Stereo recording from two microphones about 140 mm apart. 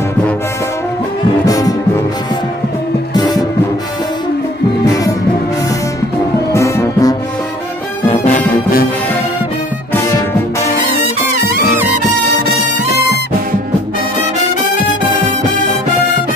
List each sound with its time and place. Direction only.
1.4 s brass instrument: 25° left (ahead or behind)
3.2 s music: 30° left (ahead or behind)
6.5 s music: 20° left (ahead or behind)
8.1 s music: 60° left (ahead or behind); by 8.8 s 75° left (ahead or behind)